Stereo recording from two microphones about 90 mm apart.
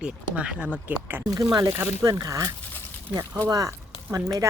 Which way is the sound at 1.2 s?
45° right (ahead or behind).